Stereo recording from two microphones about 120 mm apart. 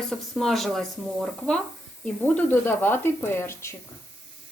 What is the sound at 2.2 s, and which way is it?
Speech, 15° left (ahead or behind).